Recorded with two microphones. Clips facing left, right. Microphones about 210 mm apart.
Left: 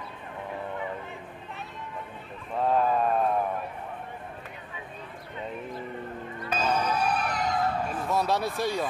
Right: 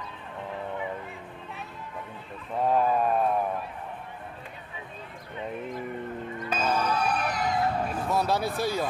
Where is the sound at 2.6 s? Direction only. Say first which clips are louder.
Even; 10° right (ahead or behind).